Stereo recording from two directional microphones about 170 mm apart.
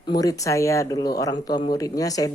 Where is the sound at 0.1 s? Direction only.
20° left (ahead or behind).